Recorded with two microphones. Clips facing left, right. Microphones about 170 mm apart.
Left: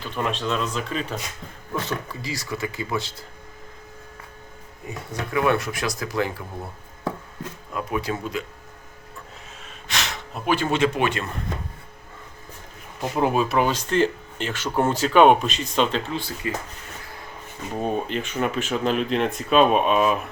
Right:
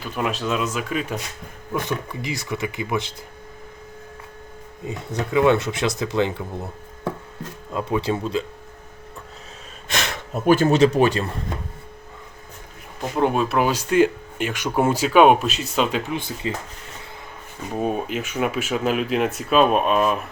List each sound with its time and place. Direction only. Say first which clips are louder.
0.0 s speech: right 1 dB; 5° right (ahead or behind)
4.9 s speech: right 4 dB; 20° right (ahead or behind)
7.7 s speech: right 4 dB; 25° right (ahead or behind)
9.9 s speech: right 4 dB; 50° right (ahead or behind); by 11.3 s 35° right (ahead or behind)
13.0 s speech: right 1 dB; 5° left (ahead or behind); by 16.5 s 20° right (ahead or behind)
17.7 s speech: right 1 dB; 5° right (ahead or behind)